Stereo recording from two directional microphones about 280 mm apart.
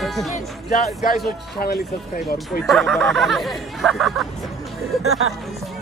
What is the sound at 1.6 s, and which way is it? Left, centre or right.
Speech, left.